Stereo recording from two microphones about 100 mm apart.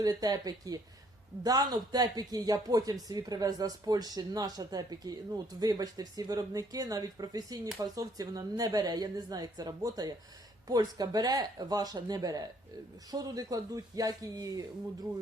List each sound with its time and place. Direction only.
0.0 s speech: 40° right (ahead or behind)